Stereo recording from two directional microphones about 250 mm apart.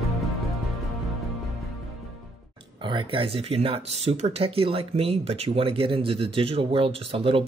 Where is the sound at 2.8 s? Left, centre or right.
Centre.